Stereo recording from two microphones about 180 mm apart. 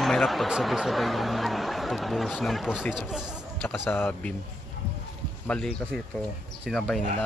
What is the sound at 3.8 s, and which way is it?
Speech, 10° left (ahead or behind).